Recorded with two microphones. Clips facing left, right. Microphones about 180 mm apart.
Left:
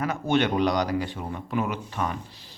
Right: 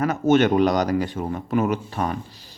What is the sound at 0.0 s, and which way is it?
Speech, 45° right (ahead or behind).